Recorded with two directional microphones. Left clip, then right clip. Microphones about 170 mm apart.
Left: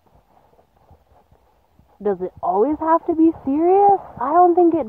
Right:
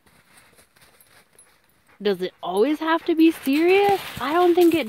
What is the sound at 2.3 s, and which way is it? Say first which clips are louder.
Speech: left 5 dB; 20° right (ahead or behind).